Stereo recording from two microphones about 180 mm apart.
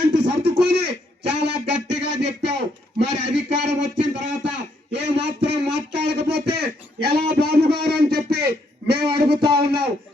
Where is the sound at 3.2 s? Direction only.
75° right (ahead or behind).